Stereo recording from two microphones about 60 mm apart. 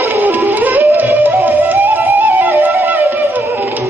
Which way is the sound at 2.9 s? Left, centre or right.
Right.